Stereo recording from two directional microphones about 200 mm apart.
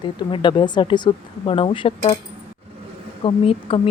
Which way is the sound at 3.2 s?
30° left (ahead or behind).